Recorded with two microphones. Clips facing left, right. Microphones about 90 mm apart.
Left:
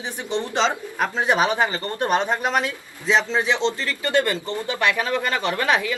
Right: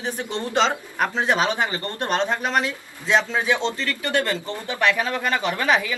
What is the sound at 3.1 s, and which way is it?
Speech, 10° right (ahead or behind).